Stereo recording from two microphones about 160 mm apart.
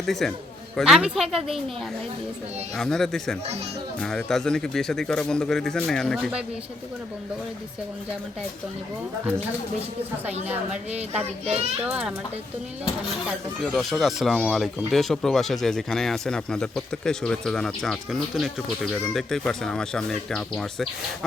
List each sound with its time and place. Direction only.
0.0 s speech: centre (ahead or behind)
2.7 s speech: 5° left (ahead or behind)
10.9 s a child's voice: 40° right (ahead or behind)
11.8 s speech: 5° right (ahead or behind)
13.2 s speech: centre (ahead or behind)